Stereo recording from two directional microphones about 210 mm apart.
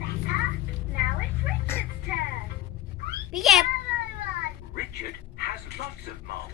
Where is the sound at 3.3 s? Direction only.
Centre (ahead or behind).